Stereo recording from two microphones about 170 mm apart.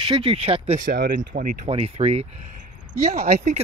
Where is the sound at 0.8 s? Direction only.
55° right (ahead or behind).